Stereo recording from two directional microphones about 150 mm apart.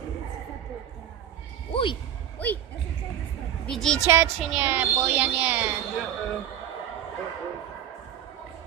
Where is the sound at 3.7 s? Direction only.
5° left (ahead or behind).